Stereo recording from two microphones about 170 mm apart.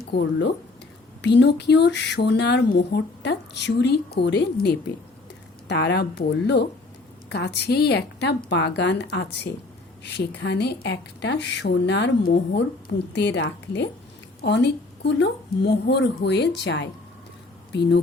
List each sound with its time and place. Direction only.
0.0 s speech: 75° left (ahead or behind)
1.2 s speech: 90° left
5.6 s a woman's voice: 90° left
8.4 s a woman's voice: 90° left